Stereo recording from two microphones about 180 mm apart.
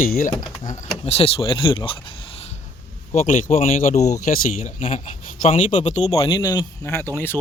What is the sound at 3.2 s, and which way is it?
Speech, 45° left (ahead or behind).